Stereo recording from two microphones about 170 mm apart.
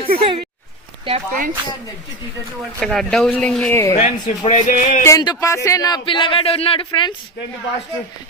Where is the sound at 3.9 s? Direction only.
40° left (ahead or behind).